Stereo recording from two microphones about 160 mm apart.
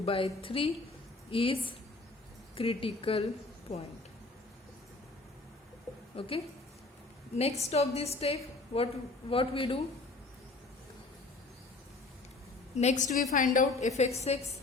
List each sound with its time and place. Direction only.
0.0 s a woman's voice: 35° left (ahead or behind)
6.1 s a woman's voice: 35° left (ahead or behind)
7.6 s a woman's voice: 40° left (ahead or behind)
12.7 s a woman's voice: 45° left (ahead or behind)